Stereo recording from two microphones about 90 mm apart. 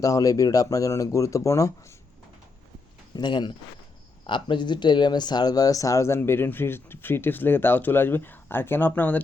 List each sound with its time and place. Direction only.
0.0 s speech: 40° left (ahead or behind)
3.2 s speech: 55° left (ahead or behind)
4.3 s speech: 65° left (ahead or behind); by 9.2 s 20° left (ahead or behind)